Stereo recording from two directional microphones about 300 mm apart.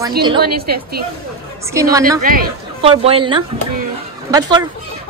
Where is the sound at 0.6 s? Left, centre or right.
Right.